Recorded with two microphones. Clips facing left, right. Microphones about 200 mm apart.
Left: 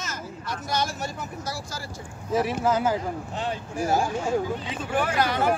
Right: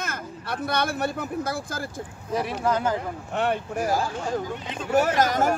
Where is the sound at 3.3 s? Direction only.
60° right (ahead or behind).